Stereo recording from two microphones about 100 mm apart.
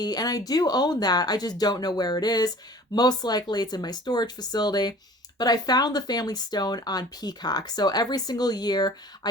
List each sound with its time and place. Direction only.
0.0 s speech: 40° left (ahead or behind)